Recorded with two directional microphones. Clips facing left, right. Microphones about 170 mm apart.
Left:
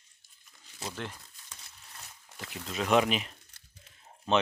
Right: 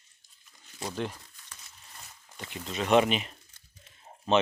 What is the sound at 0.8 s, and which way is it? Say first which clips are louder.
Speech: right 5 dB; 15° right (ahead or behind).